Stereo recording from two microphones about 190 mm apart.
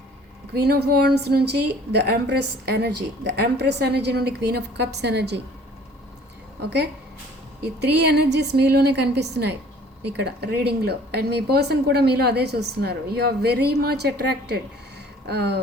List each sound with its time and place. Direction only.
0.5 s a woman's voice: 60° right (ahead or behind)
7.6 s a woman's voice: 60° right (ahead or behind)